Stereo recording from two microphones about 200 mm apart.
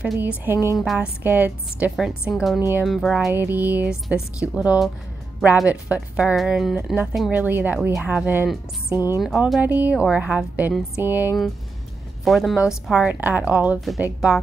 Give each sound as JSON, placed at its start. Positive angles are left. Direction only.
{"t": 0.0, "sound": "speech", "side_deg": -5}
{"t": 1.2, "sound": "music", "side_deg": -10}
{"t": 2.3, "sound": "speech", "side_deg": 0}
{"t": 2.7, "sound": "music", "side_deg": 0}
{"t": 4.6, "sound": "speech", "side_deg": 0}
{"t": 8.9, "sound": "speech", "side_deg": 15}
{"t": 9.2, "sound": "speech", "side_deg": 0}